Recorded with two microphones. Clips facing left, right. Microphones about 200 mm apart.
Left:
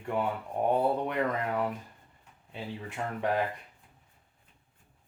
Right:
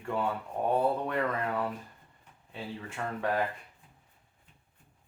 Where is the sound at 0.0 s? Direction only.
20° left (ahead or behind).